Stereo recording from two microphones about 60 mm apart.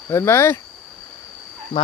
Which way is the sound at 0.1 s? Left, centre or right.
Left.